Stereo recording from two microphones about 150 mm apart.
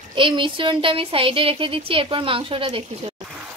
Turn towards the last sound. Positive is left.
turn(degrees=-35)  # may be behind; listen again after turning